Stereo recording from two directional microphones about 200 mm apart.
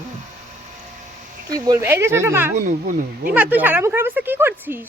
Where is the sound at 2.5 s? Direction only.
40° right (ahead or behind).